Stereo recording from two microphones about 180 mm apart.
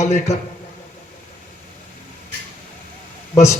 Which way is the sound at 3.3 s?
15° left (ahead or behind).